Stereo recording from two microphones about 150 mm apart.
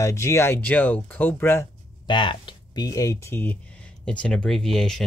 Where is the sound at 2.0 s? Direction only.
30° left (ahead or behind).